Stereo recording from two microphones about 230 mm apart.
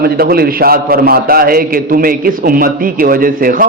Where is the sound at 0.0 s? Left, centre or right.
Right.